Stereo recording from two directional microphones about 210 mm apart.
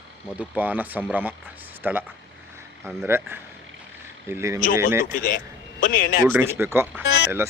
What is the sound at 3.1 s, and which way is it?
Speech, 10° right (ahead or behind).